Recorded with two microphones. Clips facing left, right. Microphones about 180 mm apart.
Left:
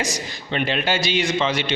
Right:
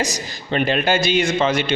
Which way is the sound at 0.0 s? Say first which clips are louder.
Right 2 dB; 40° right (ahead or behind).